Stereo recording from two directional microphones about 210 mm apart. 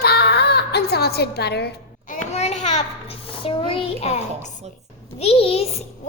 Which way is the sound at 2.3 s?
30° left (ahead or behind).